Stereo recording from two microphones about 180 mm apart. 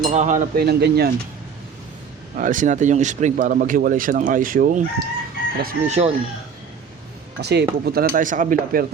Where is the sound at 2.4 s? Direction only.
45° right (ahead or behind).